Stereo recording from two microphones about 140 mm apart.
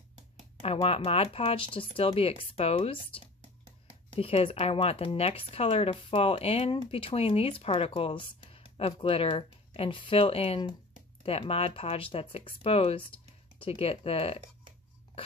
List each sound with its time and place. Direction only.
0.6 s speech: 45° left (ahead or behind)